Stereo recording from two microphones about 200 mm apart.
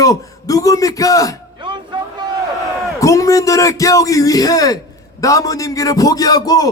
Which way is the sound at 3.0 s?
15° left (ahead or behind).